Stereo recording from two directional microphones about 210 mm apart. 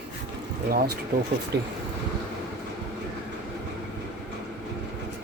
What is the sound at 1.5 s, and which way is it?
Speech, 55° right (ahead or behind).